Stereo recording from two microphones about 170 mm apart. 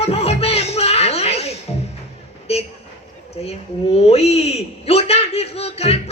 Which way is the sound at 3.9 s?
35° left (ahead or behind).